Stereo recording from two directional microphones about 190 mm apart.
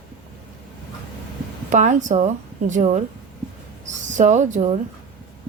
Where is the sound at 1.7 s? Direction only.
40° right (ahead or behind).